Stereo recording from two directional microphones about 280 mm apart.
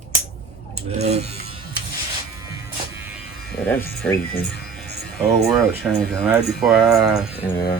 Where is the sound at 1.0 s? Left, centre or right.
Right.